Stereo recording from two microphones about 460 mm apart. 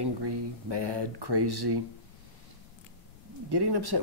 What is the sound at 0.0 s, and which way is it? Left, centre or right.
Speech, right.